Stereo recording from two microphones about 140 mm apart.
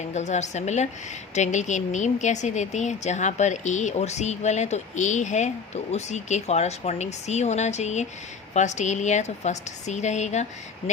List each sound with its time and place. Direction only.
0.1 s a woman's voice: 55° left (ahead or behind)